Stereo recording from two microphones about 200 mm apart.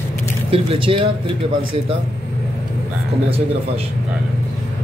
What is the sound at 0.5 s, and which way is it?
Speech, 25° right (ahead or behind).